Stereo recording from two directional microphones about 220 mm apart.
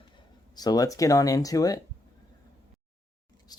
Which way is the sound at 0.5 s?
15° left (ahead or behind).